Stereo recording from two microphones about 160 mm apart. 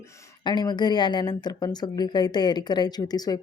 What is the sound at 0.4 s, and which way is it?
Speech, 25° left (ahead or behind).